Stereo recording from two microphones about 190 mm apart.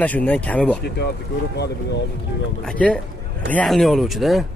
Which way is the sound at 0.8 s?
60° left (ahead or behind).